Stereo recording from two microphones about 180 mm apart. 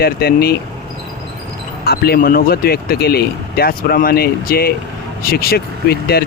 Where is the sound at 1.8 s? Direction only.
60° left (ahead or behind).